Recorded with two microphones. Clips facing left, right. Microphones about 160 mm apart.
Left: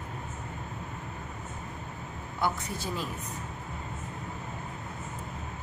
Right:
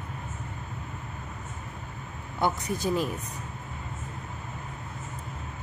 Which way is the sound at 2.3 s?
20° right (ahead or behind).